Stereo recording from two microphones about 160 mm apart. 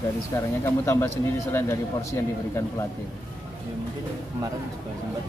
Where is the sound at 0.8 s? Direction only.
15° left (ahead or behind).